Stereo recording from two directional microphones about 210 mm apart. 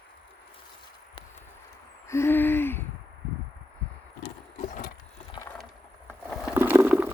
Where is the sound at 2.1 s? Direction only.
10° left (ahead or behind).